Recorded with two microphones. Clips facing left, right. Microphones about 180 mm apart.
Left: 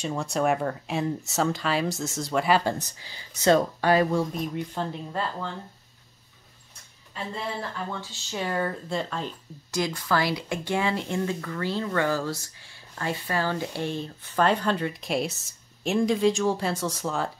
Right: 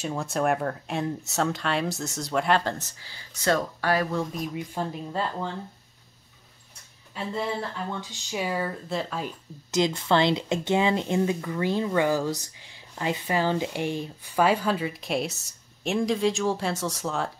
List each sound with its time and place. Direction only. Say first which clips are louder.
0.0 s speech: left 1 dB; 5° right (ahead or behind)
2.8 s speech: left 3 dB; 20° left (ahead or behind)
4.2 s speech: left 2 dB; 5° right (ahead or behind)
8.0 s speech: right 1 dB; 15° right (ahead or behind)
9.7 s speech: right 3 dB; 20° right (ahead or behind); by 17.3 s centre (ahead or behind)